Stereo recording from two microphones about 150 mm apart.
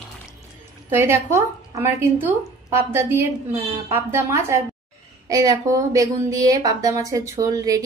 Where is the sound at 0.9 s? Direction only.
15° right (ahead or behind).